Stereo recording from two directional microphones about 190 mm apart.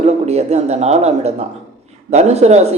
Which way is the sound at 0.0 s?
35° right (ahead or behind).